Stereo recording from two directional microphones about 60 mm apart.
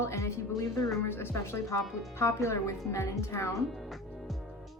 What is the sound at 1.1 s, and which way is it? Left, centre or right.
A woman's voice, left.